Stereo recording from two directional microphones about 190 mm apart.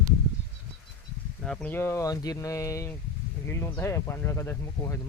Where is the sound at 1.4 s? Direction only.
5° left (ahead or behind).